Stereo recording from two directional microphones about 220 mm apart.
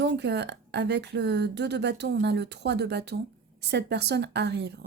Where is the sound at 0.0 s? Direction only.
50° right (ahead or behind).